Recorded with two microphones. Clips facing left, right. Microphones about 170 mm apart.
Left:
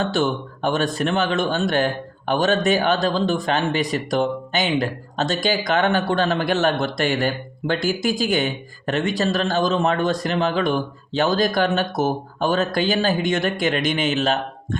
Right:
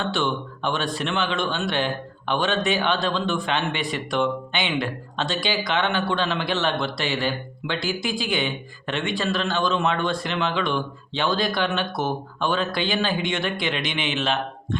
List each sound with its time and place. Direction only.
0.0 s speech: 40° left (ahead or behind)